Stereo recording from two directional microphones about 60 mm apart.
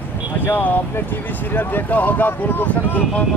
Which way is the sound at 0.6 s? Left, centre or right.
Left.